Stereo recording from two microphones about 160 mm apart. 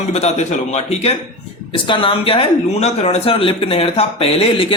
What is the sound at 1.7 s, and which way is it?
Speech, 30° left (ahead or behind).